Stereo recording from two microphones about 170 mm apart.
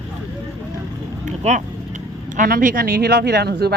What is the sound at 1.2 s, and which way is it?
Speech, 45° right (ahead or behind).